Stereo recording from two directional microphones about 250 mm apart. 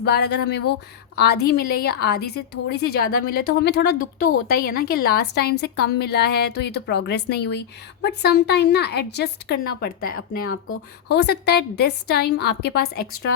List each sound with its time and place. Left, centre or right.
0.0 s a woman's voice: left